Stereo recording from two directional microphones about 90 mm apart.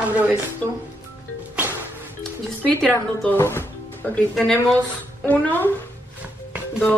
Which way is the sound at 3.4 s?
25° left (ahead or behind).